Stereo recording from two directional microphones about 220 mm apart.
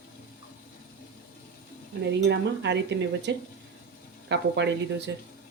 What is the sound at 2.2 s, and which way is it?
Speech, 50° right (ahead or behind).